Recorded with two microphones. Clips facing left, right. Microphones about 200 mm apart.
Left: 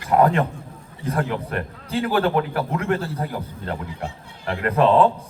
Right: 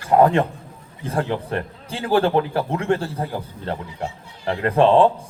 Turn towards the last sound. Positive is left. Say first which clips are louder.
# right 2 dB
turn(degrees=-30)  # may be behind; listen again after turning